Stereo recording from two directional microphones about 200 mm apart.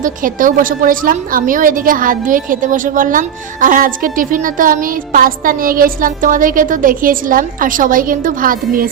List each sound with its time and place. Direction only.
0.0 s a woman's voice: 40° right (ahead or behind)